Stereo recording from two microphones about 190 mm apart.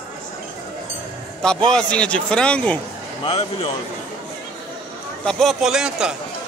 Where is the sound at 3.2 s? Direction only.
30° left (ahead or behind).